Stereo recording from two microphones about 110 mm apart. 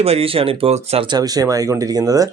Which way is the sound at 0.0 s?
65° right (ahead or behind).